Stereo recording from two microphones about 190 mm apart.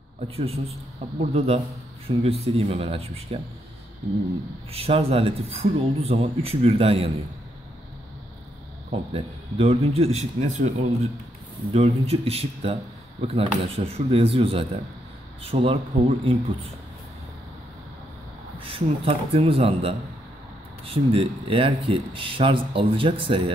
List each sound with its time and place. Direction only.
1.2 s speech: 35° right (ahead or behind)
4.6 s speech: 30° right (ahead or behind)
8.9 s speech: 30° right (ahead or behind)
18.6 s speech: 30° right (ahead or behind)